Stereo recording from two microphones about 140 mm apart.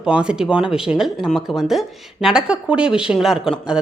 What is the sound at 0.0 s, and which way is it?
A woman's voice, 5° right (ahead or behind).